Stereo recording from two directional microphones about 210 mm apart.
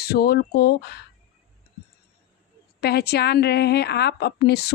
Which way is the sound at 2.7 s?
50° left (ahead or behind).